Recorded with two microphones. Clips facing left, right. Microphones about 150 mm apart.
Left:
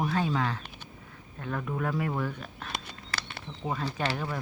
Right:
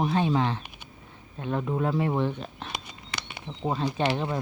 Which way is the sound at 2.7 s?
15° right (ahead or behind).